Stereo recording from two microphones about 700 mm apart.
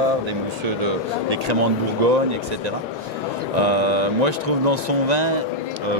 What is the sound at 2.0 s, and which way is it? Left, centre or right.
Speech, right.